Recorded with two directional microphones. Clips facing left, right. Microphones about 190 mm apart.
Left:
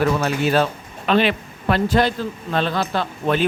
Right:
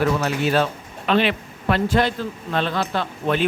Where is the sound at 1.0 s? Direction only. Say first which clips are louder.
Left 2 dB; 40° left (ahead or behind).